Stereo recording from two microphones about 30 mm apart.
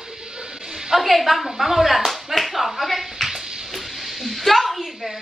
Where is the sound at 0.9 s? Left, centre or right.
Centre.